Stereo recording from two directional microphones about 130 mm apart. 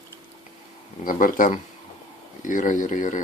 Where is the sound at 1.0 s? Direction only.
90° left.